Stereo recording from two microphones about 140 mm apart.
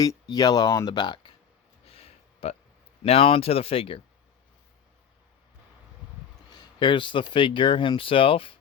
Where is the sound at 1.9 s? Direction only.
45° left (ahead or behind).